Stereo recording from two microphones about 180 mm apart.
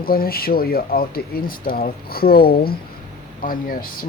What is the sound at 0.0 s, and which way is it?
Speech, 55° left (ahead or behind).